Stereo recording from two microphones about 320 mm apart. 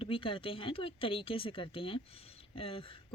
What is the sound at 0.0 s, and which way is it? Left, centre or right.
Speech, centre.